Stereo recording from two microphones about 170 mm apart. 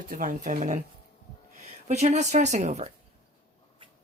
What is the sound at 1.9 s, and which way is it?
Speech, 40° right (ahead or behind).